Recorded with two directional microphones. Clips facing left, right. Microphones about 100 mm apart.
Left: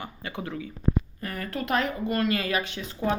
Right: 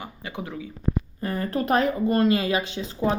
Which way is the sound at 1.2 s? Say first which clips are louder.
Right 11 dB; 30° right (ahead or behind).